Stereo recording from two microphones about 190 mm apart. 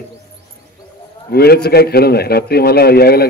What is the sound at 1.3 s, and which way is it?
A man's voice, 55° left (ahead or behind).